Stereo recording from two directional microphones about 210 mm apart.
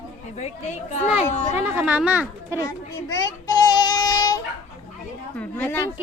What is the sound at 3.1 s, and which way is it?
Child singing, 15° left (ahead or behind).